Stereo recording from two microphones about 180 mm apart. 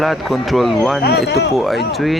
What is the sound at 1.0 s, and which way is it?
Speech, 65° left (ahead or behind).